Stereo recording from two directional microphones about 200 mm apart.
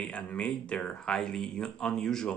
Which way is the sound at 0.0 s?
5° left (ahead or behind).